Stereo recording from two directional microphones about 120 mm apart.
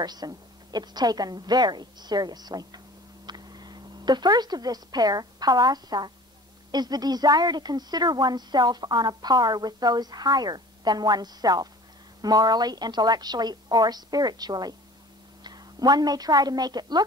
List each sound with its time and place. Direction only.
0.0 s a woman's voice: 35° right (ahead or behind)